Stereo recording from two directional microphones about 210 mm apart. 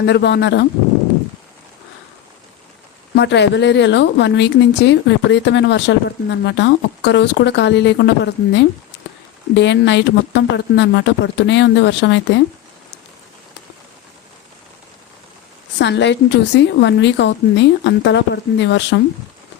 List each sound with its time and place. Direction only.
0.0 s a woman's voice: 55° left (ahead or behind)
3.2 s a woman's voice: 55° left (ahead or behind)
15.8 s a woman's voice: 55° left (ahead or behind)